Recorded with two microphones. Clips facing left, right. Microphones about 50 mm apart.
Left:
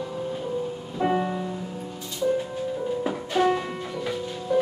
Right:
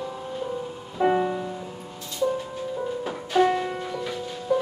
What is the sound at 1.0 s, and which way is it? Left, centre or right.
Music, centre.